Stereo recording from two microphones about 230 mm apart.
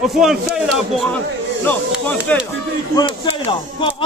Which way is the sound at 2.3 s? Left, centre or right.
Centre.